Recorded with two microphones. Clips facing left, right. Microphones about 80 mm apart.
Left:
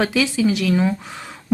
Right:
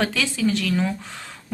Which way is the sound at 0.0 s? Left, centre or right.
Centre.